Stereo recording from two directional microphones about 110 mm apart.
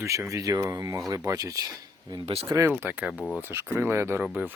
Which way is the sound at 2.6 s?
20° right (ahead or behind).